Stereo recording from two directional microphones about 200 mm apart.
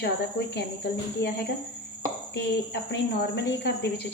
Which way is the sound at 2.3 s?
55° left (ahead or behind).